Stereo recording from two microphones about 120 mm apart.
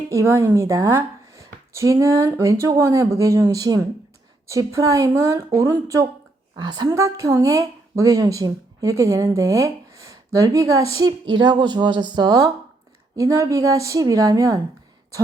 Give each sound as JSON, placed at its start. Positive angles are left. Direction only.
{"t": 0.1, "sound": "speech", "side_deg": -25}
{"t": 6.6, "sound": "a woman's voice", "side_deg": -35}
{"t": 6.8, "sound": "a woman's voice", "side_deg": -25}